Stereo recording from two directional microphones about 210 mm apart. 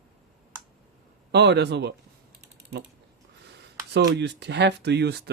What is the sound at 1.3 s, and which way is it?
Speech, 55° right (ahead or behind).